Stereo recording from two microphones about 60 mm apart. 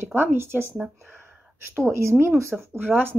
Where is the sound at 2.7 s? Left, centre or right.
Right.